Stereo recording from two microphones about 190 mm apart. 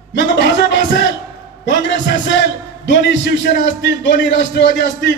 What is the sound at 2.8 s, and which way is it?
Speech, 70° left (ahead or behind).